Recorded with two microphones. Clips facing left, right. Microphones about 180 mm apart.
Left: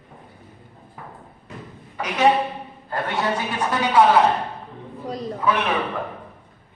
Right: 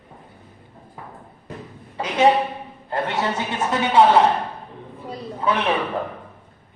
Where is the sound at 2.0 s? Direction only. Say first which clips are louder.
Right 1 dB; 30° right (ahead or behind).